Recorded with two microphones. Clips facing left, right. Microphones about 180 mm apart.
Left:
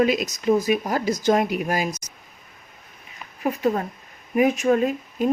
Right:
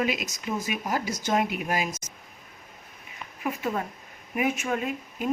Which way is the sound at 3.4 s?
35° left (ahead or behind).